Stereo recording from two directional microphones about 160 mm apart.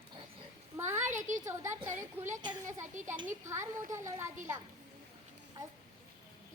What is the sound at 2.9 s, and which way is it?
Speech, 50° right (ahead or behind).